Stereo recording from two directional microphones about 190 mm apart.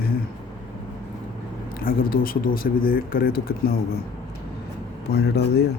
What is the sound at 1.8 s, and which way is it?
Speech, 50° left (ahead or behind).